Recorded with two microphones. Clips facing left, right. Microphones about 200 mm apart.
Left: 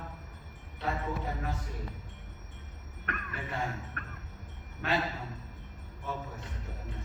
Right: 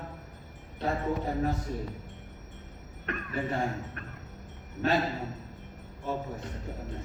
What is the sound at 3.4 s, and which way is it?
Speech, 45° right (ahead or behind).